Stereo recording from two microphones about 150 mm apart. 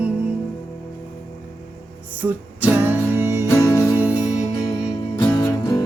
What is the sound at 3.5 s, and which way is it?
Music, 20° left (ahead or behind).